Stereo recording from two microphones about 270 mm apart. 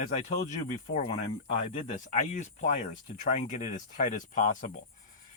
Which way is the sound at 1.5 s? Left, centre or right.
Left.